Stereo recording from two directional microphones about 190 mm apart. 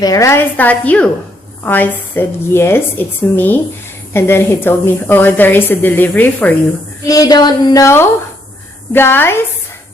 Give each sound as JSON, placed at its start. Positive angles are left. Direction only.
{"t": 0.0, "sound": "a woman's voice", "side_deg": 20}
{"t": 7.1, "sound": "a sound", "side_deg": 20}
{"t": 8.9, "sound": "a woman's voice", "side_deg": 10}